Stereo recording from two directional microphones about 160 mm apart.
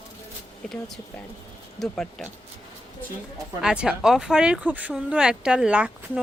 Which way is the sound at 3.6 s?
5° right (ahead or behind).